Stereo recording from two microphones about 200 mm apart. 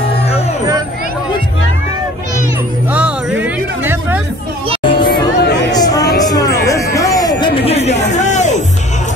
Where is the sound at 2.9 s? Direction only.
5° right (ahead or behind).